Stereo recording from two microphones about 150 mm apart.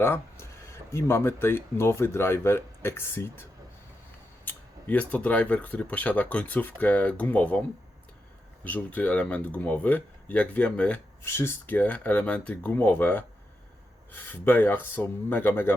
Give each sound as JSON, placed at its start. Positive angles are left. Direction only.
{"t": 0.0, "sound": "speech", "side_deg": 15}
{"t": 4.4, "sound": "speech", "side_deg": 10}
{"t": 8.6, "sound": "speech", "side_deg": 10}